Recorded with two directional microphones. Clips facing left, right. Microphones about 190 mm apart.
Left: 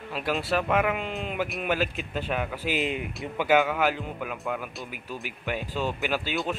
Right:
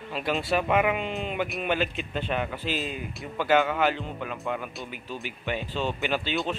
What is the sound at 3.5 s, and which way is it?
Speech, 5° left (ahead or behind).